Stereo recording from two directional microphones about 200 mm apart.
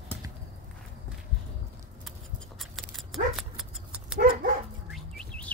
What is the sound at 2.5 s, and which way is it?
Dog, centre (ahead or behind).